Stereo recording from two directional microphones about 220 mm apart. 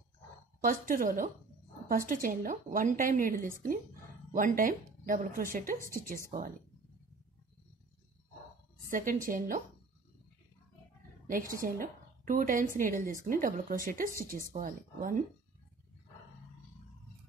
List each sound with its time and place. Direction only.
0.6 s a woman's voice: 40° right (ahead or behind)
8.9 s a woman's voice: 35° right (ahead or behind)
11.2 s a woman's voice: 40° right (ahead or behind)